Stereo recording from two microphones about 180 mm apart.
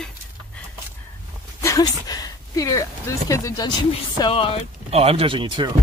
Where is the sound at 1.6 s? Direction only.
20° left (ahead or behind).